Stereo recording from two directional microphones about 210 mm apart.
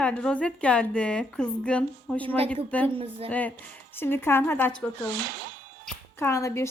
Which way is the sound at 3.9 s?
10° left (ahead or behind).